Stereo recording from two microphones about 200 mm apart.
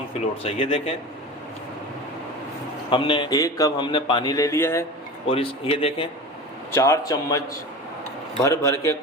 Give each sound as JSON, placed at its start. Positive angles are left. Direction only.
{"t": 0.4, "sound": "a man's voice", "side_deg": 30}
{"t": 2.9, "sound": "a man's voice", "side_deg": 25}
{"t": 5.3, "sound": "a man's voice", "side_deg": 25}
{"t": 6.7, "sound": "a man's voice", "side_deg": 15}